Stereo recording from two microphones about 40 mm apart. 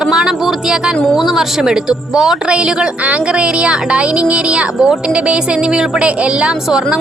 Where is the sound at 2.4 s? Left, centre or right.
Right.